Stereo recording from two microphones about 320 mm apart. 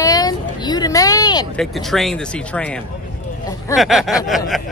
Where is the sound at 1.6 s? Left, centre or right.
Centre.